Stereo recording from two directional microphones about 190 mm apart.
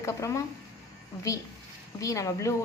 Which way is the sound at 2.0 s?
15° left (ahead or behind).